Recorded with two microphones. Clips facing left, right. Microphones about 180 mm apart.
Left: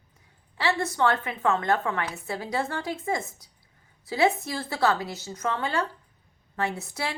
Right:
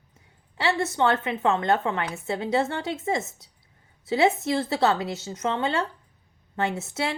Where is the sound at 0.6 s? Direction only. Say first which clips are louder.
Right 1 dB; 25° right (ahead or behind).